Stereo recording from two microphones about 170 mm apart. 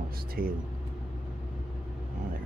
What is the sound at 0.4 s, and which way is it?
Speech, 60° right (ahead or behind).